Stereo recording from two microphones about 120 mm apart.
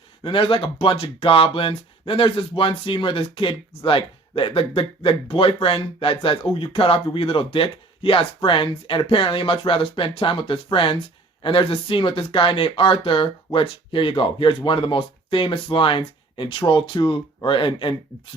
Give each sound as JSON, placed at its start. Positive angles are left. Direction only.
{"t": 0.3, "sound": "speech", "side_deg": 50}